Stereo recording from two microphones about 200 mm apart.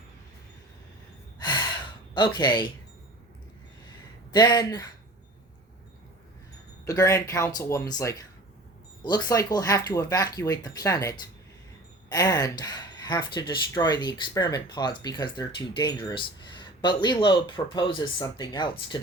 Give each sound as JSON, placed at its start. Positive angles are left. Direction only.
{"t": 1.4, "sound": "sigh", "side_deg": 20}
{"t": 2.1, "sound": "speech", "side_deg": 25}
{"t": 4.3, "sound": "speech", "side_deg": 20}
{"t": 6.8, "sound": "speech", "side_deg": 15}